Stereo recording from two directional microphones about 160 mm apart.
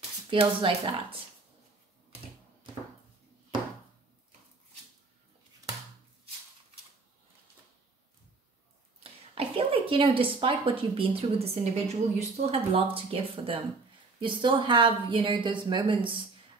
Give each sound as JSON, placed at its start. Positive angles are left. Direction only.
{"t": 0.3, "sound": "speech", "side_deg": -35}
{"t": 9.3, "sound": "speech", "side_deg": -35}